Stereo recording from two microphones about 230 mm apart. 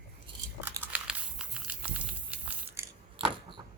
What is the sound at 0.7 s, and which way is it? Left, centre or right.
Crumpling, centre.